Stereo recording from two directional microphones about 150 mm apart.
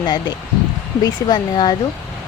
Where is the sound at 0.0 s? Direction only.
30° left (ahead or behind).